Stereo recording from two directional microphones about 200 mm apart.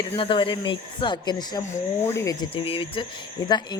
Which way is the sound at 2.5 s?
25° left (ahead or behind).